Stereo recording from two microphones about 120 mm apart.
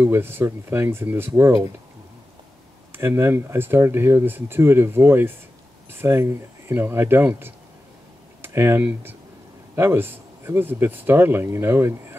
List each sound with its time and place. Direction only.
0.0 s speech: 20° right (ahead or behind)
2.9 s speech: 20° right (ahead or behind)
8.4 s a sound: 20° right (ahead or behind)
9.8 s speech: 20° right (ahead or behind)